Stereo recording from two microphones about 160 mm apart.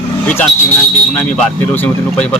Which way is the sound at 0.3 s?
10° left (ahead or behind).